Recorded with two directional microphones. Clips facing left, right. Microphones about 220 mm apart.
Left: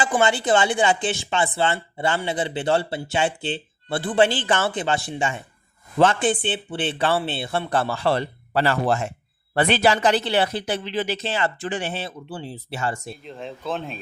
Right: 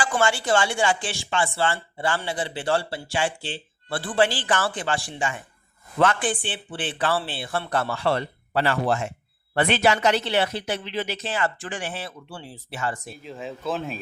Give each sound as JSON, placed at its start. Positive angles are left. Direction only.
{"t": 0.0, "sound": "a man's voice", "side_deg": 20}
{"t": 13.2, "sound": "speech", "side_deg": -5}